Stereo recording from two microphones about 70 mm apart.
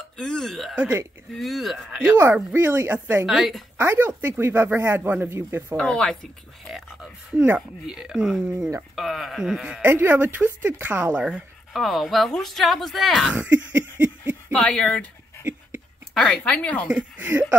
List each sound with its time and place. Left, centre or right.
0.2 s speech: centre
2.0 s speech: right
3.3 s speech: centre
3.7 s speech: right
5.8 s speech: centre
7.5 s speech: centre
9.8 s speech: right
11.7 s speech: centre
13.3 s a sound: right
14.5 s speech: centre
16.3 s speech: centre
16.9 s speech: centre